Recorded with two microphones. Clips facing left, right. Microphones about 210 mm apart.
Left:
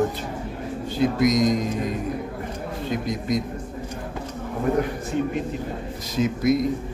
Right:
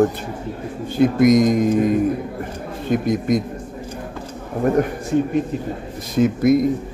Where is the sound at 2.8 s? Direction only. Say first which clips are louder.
Right 8 dB; 55° right (ahead or behind).